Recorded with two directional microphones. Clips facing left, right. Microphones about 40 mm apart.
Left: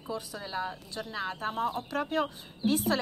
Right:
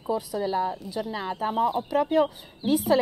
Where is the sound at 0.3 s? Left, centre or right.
Centre.